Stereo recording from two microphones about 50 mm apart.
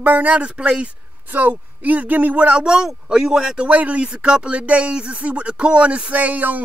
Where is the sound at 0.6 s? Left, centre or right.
Right.